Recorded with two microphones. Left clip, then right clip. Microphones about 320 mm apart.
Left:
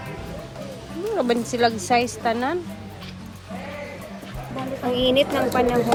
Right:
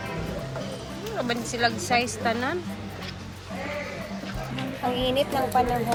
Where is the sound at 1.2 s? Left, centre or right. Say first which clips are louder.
Left 5 dB; centre.